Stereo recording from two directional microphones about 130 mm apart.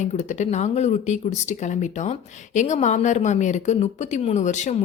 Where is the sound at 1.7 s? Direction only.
70° left (ahead or behind).